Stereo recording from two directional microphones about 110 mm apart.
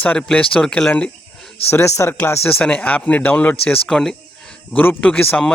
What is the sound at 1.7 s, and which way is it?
A man's voice, 25° left (ahead or behind).